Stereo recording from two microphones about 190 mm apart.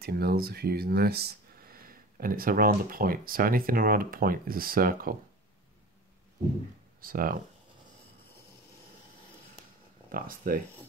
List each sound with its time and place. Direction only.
0.0 s speech: 55° right (ahead or behind)
7.0 s speech: 50° right (ahead or behind)
10.1 s speech: 45° right (ahead or behind)